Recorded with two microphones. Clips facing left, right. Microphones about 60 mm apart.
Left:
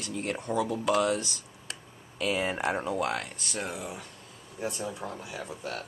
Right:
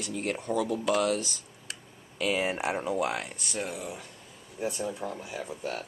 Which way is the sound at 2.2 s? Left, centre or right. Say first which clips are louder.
Even; centre.